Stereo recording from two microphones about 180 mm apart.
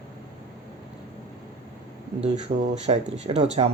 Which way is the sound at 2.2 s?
40° right (ahead or behind).